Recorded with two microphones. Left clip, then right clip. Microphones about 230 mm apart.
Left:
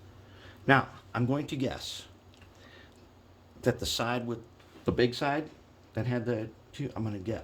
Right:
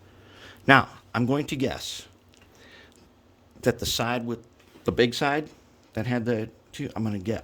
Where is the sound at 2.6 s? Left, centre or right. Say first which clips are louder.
Right 4 dB; right.